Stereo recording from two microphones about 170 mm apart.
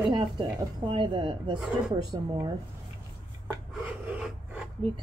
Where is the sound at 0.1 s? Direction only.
30° right (ahead or behind).